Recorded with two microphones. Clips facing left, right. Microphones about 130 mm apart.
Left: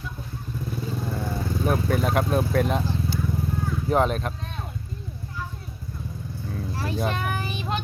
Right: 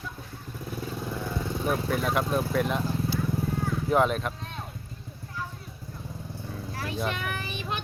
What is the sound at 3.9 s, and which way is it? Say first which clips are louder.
Speech: left 1 dB; 35° left (ahead or behind).